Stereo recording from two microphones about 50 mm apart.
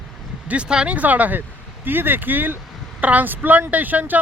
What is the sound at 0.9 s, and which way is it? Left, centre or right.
Speech, right.